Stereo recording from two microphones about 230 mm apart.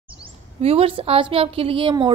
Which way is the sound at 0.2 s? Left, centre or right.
Right.